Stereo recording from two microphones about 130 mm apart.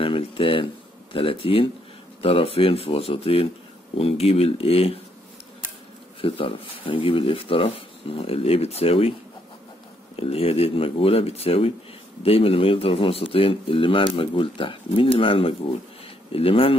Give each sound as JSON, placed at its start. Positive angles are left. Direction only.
{"t": 0.0, "sound": "speech", "side_deg": 45}
{"t": 6.2, "sound": "speech", "side_deg": 40}
{"t": 10.1, "sound": "speech", "side_deg": 45}